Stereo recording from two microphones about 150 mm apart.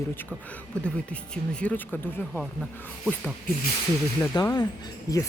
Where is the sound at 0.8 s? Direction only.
5° left (ahead or behind).